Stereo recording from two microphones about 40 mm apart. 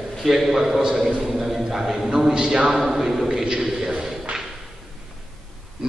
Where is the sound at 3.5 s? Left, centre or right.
Centre.